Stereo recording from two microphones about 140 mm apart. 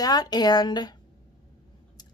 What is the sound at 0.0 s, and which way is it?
Speech, 30° left (ahead or behind).